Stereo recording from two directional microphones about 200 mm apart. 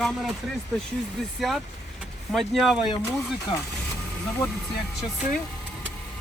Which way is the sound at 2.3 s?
Centre (ahead or behind).